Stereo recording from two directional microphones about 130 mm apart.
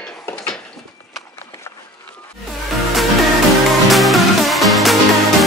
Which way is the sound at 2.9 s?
Centre (ahead or behind).